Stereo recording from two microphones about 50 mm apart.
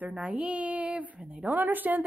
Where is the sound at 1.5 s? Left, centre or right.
Right.